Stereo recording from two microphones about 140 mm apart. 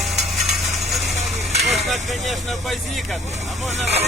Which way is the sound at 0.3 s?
Centre (ahead or behind).